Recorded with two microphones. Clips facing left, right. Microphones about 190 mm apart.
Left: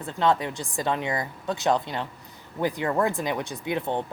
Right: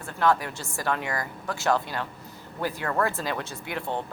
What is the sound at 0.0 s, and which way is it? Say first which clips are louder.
A woman's voice: left 1 dB; 20° left (ahead or behind).